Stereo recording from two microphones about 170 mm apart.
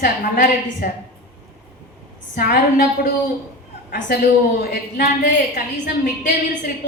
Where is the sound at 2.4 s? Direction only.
60° left (ahead or behind).